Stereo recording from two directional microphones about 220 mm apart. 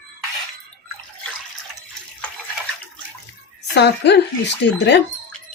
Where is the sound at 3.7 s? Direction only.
50° left (ahead or behind).